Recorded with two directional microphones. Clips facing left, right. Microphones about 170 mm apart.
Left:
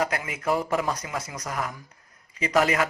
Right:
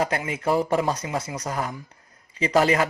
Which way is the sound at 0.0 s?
30° right (ahead or behind).